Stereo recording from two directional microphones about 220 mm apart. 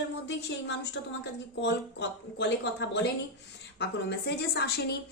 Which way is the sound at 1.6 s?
50° left (ahead or behind).